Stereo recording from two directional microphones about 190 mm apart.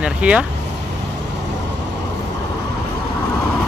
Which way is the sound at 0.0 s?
5° right (ahead or behind).